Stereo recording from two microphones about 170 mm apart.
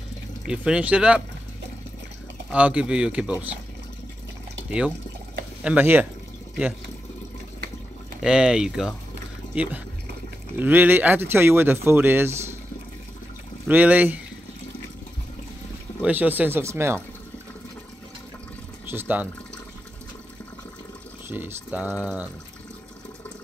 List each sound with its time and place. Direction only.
0.5 s speech: 5° right (ahead or behind)
2.5 s speech: 5° right (ahead or behind)
4.6 s speech: 10° right (ahead or behind)
8.2 s speech: 5° right (ahead or behind)
13.7 s speech: 10° right (ahead or behind)
16.0 s speech: 10° right (ahead or behind)
18.9 s speech: 10° right (ahead or behind)
21.3 s speech: 10° right (ahead or behind)